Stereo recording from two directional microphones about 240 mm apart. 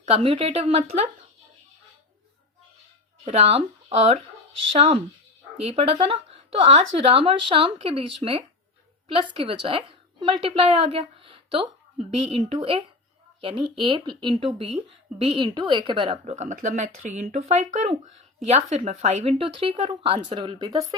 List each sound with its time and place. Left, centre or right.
0.0 s speech: right
3.2 s speech: right
5.6 s a woman's voice: right